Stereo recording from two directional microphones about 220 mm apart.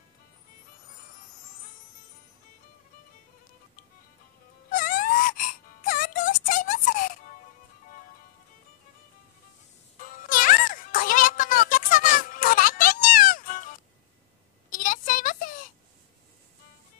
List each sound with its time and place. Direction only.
4.6 s wail: 40° left (ahead or behind)
9.9 s music: 40° left (ahead or behind)
14.7 s a sound: 40° left (ahead or behind)